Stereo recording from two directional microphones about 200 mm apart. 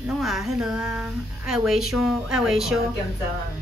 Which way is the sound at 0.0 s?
Centre (ahead or behind).